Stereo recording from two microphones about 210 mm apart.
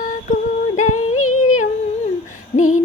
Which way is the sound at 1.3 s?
35° left (ahead or behind).